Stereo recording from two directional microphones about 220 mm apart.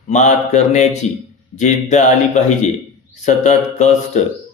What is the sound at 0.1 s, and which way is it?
Speech, 30° left (ahead or behind).